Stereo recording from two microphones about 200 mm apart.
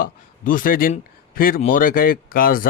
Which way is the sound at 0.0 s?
45° left (ahead or behind).